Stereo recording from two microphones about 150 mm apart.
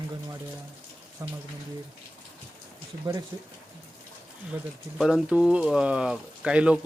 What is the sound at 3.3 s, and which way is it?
Speech, 20° right (ahead or behind).